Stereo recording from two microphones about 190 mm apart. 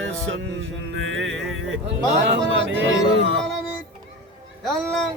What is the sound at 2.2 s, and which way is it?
Speech, 65° right (ahead or behind).